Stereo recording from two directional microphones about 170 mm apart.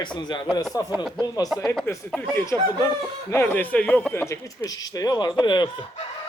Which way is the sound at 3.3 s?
15° left (ahead or behind).